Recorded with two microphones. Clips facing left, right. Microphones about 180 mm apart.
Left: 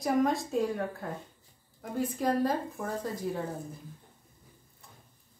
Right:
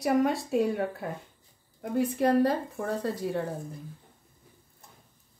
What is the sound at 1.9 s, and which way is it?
Speech, 65° right (ahead or behind).